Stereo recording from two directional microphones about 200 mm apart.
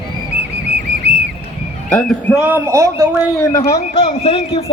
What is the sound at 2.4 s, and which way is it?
Speech, 10° right (ahead or behind).